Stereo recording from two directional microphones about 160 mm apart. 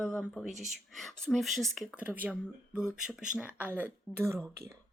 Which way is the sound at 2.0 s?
10° right (ahead or behind).